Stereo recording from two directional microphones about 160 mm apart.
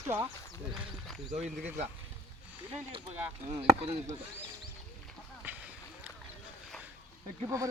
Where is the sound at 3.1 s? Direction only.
10° right (ahead or behind).